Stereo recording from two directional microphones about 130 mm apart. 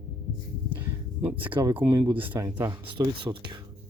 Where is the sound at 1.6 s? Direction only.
30° right (ahead or behind).